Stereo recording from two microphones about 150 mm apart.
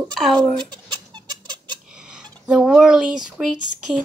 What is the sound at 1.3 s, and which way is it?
Squeak, 30° right (ahead or behind).